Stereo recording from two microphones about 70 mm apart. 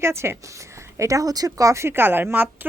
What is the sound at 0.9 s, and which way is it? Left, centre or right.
Speech, right.